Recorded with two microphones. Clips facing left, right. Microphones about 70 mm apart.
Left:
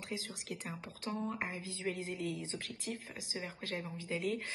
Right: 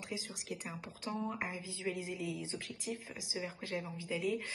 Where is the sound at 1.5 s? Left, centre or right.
Left.